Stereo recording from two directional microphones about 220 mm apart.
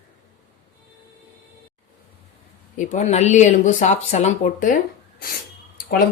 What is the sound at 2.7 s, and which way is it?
Speech, 30° left (ahead or behind).